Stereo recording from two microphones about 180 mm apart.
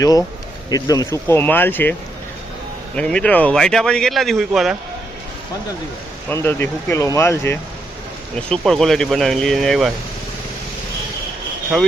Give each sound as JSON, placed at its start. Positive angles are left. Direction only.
{"t": 0.0, "sound": "speech", "side_deg": 20}
{"t": 6.2, "sound": "speech", "side_deg": 15}
{"t": 8.4, "sound": "speech", "side_deg": 5}